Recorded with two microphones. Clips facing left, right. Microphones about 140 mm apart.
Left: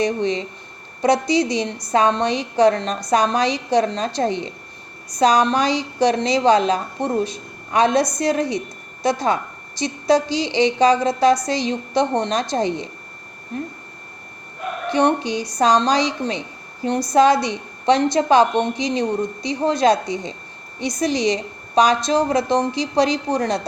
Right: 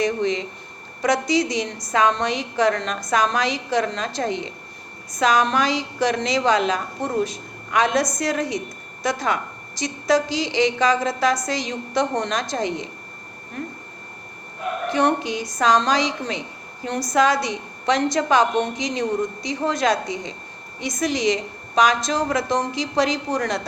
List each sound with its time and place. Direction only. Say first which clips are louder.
0.0 s a woman's voice: left 1 dB; 30° left (ahead or behind)
14.9 s a woman's voice: left 3 dB; 30° left (ahead or behind)